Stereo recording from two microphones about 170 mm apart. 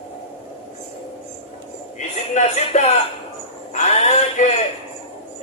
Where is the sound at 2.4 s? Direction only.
40° left (ahead or behind).